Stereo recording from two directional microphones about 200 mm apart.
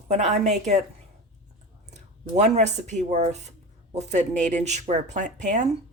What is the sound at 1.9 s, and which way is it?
A woman's voice, 35° right (ahead or behind).